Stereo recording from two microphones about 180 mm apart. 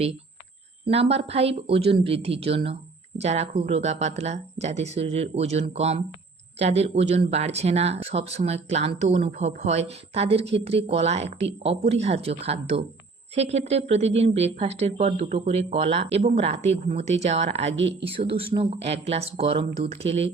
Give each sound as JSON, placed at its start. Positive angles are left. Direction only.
{"t": 0.9, "sound": "a woman's voice", "side_deg": -35}